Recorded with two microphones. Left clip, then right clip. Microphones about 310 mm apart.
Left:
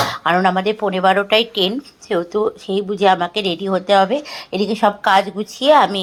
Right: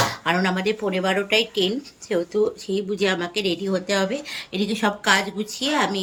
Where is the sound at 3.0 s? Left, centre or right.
Centre.